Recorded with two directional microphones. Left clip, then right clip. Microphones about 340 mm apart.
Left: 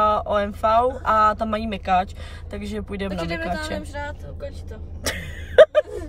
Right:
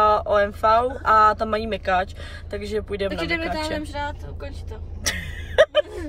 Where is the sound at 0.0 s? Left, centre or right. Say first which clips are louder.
Right 2 dB; centre.